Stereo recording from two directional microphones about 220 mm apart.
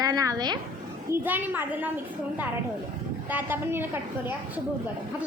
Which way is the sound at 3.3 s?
10° right (ahead or behind).